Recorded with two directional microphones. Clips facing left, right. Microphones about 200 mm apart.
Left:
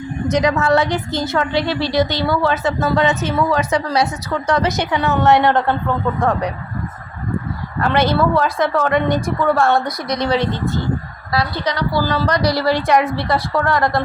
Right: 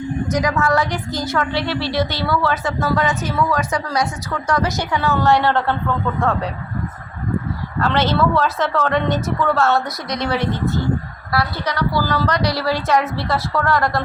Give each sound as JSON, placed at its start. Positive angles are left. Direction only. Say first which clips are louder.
{"t": 0.3, "sound": "a woman's voice", "louder": "left 5 dB", "side_deg": 25}
{"t": 1.8, "sound": "a woman's voice", "louder": "left 4 dB", "side_deg": -5}
{"t": 2.2, "sound": "a woman's voice", "louder": "left 2 dB", "side_deg": 20}
{"t": 7.8, "sound": "a woman's voice", "louder": "left 2 dB", "side_deg": 10}